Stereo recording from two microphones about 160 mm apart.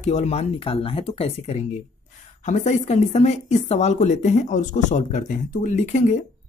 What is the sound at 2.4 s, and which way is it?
Speech, 50° left (ahead or behind).